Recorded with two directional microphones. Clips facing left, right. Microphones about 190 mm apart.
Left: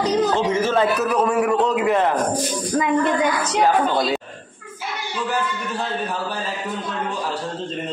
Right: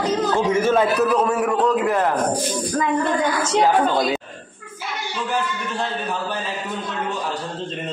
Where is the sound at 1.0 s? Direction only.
5° left (ahead or behind).